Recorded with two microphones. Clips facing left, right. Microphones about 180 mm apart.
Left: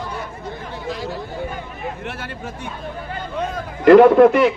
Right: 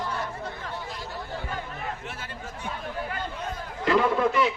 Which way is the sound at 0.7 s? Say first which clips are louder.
Left 8 dB; 90° left.